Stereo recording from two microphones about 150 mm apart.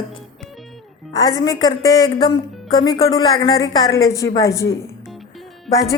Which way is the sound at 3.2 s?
25° left (ahead or behind).